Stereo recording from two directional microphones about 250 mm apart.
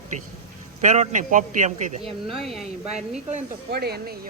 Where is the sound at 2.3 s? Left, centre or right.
Centre.